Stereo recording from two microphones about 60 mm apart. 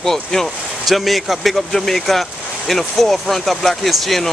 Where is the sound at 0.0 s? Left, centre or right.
Centre.